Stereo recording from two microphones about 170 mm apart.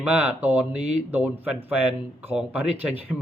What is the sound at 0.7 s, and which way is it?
Speech, 40° right (ahead or behind).